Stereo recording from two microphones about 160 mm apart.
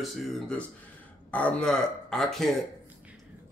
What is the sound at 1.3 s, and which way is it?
A man's voice, 5° left (ahead or behind).